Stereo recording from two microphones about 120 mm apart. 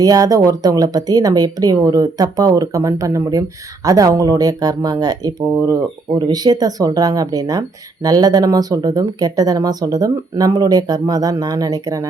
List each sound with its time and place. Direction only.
0.0 s speech: 30° right (ahead or behind)